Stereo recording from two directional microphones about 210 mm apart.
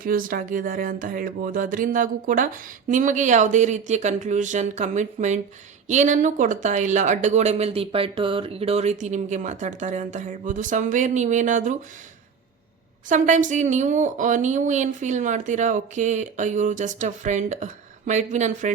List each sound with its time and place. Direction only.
0.0 s speech: 40° right (ahead or behind)
13.1 s speech: 35° right (ahead or behind)